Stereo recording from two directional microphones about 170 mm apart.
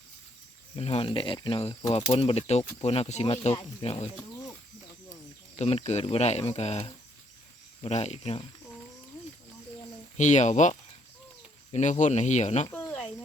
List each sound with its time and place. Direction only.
0.8 s speech: 35° left (ahead or behind)
5.5 s speech: 40° left (ahead or behind)
10.2 s speech: 45° left (ahead or behind)
12.7 s cricket: 10° left (ahead or behind)